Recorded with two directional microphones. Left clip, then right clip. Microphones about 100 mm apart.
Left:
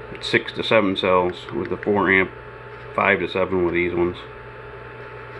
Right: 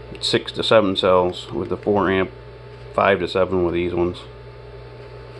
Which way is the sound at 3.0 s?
35° right (ahead or behind).